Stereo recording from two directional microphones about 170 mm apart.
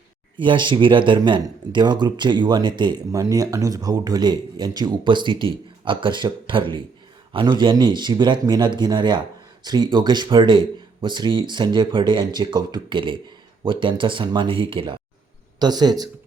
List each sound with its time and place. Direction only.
0.3 s speech: 30° right (ahead or behind)